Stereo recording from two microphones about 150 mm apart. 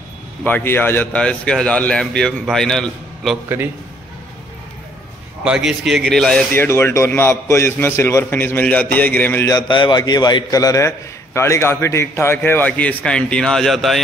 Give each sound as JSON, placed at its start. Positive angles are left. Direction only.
{"t": 0.4, "sound": "a man's voice", "side_deg": 10}
{"t": 5.4, "sound": "a man's voice", "side_deg": -5}
{"t": 9.6, "sound": "a man's voice", "side_deg": 30}